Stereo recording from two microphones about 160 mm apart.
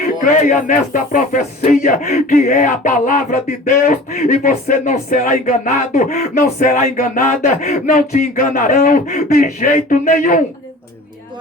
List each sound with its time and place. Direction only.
0.2 s music: 55° left (ahead or behind)